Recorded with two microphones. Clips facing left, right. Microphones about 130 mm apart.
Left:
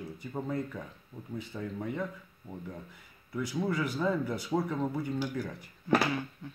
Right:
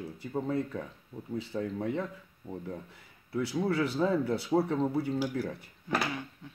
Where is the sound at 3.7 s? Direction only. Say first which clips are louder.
Right 3 dB; 30° right (ahead or behind).